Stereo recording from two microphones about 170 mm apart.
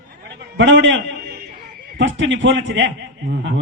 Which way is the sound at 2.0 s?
90° right.